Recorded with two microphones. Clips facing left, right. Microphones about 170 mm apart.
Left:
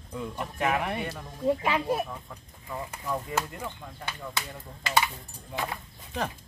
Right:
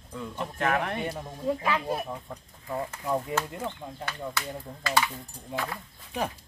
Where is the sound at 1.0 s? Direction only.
25° right (ahead or behind).